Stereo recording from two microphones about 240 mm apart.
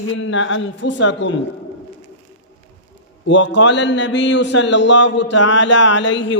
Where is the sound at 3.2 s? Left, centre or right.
Left.